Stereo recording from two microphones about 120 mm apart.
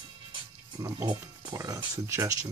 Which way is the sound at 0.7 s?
35° right (ahead or behind).